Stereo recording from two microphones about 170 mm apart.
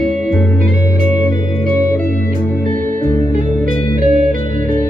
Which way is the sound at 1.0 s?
50° right (ahead or behind).